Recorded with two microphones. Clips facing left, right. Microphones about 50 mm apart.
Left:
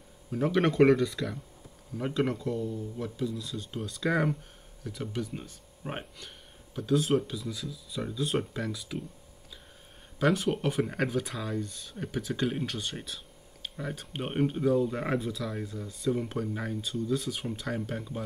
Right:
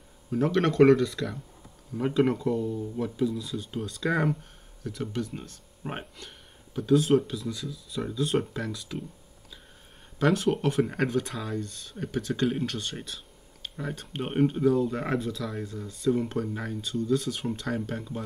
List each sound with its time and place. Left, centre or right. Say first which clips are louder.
0.3 s speech: right 2 dB; centre
10.1 s speech: right 2 dB; centre